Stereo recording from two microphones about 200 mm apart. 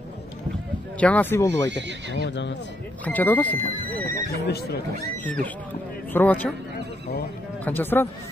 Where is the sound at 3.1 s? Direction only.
10° left (ahead or behind).